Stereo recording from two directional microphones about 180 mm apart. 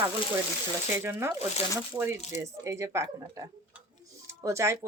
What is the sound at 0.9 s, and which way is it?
Speech, 15° right (ahead or behind).